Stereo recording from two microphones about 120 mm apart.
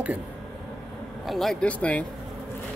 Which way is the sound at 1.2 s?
Centre (ahead or behind).